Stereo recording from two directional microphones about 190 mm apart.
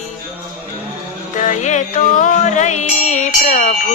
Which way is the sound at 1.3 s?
40° left (ahead or behind).